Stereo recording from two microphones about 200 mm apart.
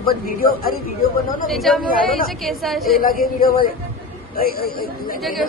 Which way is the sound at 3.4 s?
45° left (ahead or behind).